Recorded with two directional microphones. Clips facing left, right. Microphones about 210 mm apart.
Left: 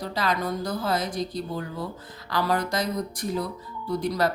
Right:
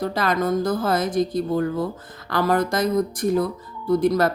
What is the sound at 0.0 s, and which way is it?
Speech, 50° right (ahead or behind).